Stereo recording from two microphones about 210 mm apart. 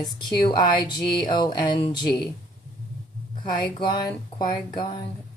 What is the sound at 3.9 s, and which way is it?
Speech, 15° left (ahead or behind).